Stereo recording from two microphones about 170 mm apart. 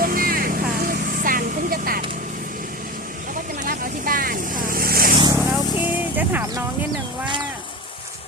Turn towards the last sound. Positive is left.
turn(degrees=-10)  # may be behind; listen again after turning